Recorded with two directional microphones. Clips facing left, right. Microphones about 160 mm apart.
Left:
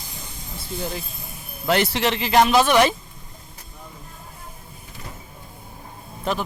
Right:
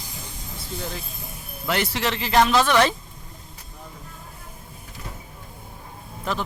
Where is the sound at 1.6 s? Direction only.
30° left (ahead or behind); by 2.9 s 15° left (ahead or behind).